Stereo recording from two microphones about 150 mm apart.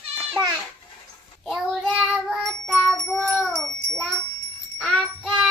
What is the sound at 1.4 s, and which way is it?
Child singing, 5° right (ahead or behind).